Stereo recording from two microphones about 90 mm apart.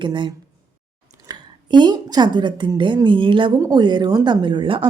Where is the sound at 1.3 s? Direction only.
55° right (ahead or behind); by 3.6 s 70° right (ahead or behind).